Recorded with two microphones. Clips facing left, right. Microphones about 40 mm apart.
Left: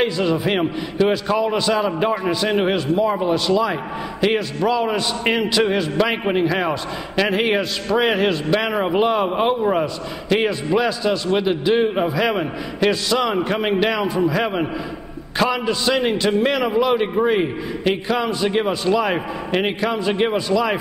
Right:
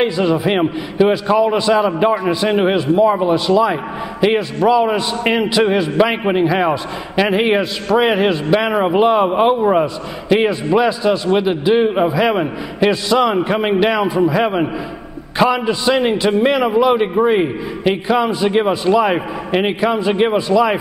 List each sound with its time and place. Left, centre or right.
0.0 s a man's voice: centre